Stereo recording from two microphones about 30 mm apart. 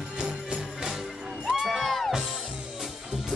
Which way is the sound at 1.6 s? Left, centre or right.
Centre.